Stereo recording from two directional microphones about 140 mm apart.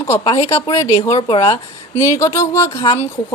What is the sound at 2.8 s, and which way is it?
Speech, 45° left (ahead or behind).